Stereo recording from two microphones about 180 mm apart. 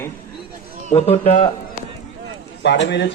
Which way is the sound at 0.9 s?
35° left (ahead or behind).